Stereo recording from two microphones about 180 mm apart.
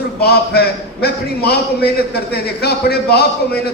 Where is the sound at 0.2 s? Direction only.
60° left (ahead or behind).